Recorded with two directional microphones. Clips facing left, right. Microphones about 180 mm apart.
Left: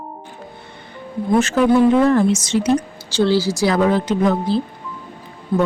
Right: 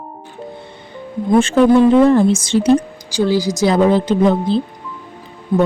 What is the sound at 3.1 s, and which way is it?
Speech, 15° right (ahead or behind).